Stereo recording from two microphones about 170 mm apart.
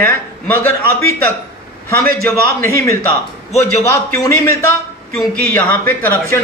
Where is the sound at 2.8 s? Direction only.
15° left (ahead or behind).